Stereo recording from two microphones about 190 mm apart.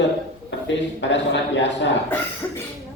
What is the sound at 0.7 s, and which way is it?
A man's voice, 70° left (ahead or behind).